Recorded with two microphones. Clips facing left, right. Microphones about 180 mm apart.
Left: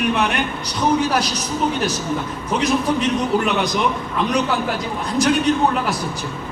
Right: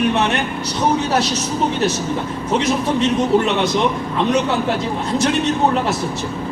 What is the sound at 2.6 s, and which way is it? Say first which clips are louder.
A man's voice: left 1 dB; 25° right (ahead or behind).